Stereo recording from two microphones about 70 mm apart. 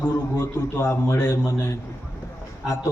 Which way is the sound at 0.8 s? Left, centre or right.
Left.